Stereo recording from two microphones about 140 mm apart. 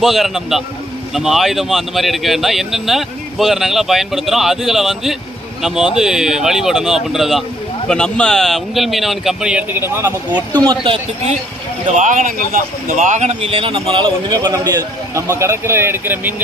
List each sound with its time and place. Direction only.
0.0 s speech: centre (ahead or behind); by 10.4 s 15° right (ahead or behind)
10.6 s speech: 35° right (ahead or behind)
11.9 s speech: 65° right (ahead or behind); by 16.3 s 15° right (ahead or behind)